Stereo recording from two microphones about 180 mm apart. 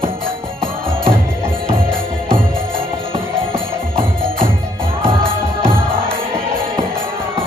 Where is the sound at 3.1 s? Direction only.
30° right (ahead or behind).